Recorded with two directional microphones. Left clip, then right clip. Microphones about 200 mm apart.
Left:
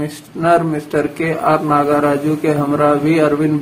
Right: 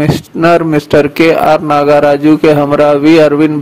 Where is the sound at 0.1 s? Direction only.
45° right (ahead or behind).